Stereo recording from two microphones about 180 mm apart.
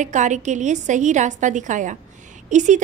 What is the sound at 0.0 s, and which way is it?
A woman's voice, 45° right (ahead or behind).